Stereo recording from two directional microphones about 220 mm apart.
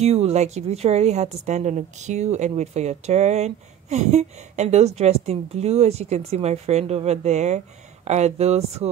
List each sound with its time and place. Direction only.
0.0 s a woman's voice: 30° right (ahead or behind)